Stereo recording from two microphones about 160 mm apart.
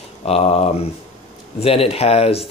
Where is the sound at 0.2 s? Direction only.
40° left (ahead or behind).